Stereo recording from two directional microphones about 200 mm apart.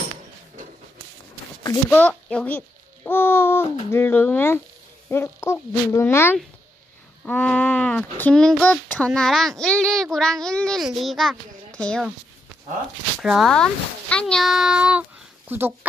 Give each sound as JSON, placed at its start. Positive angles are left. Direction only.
{"t": 1.9, "sound": "speech", "side_deg": 5}
{"t": 13.2, "sound": "speech", "side_deg": 0}